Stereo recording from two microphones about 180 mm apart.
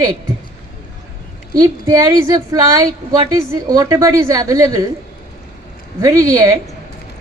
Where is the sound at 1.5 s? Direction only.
20° right (ahead or behind).